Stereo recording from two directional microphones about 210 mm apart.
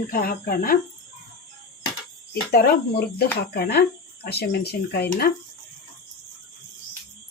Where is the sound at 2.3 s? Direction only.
45° left (ahead or behind).